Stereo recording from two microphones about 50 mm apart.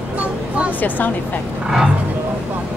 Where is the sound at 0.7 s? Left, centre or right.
Left.